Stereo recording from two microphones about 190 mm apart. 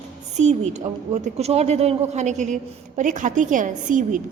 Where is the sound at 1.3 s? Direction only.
35° right (ahead or behind).